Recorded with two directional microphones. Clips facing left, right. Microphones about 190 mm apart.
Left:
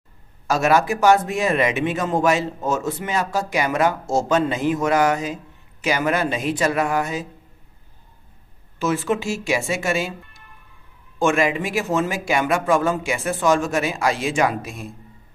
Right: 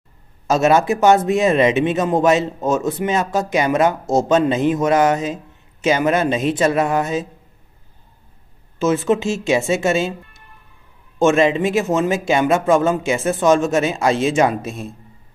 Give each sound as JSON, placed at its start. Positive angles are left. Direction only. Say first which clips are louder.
{"t": 0.5, "sound": "a man's voice", "louder": "right 3 dB", "side_deg": -25}
{"t": 8.7, "sound": "a man's voice", "louder": "right 5 dB", "side_deg": -20}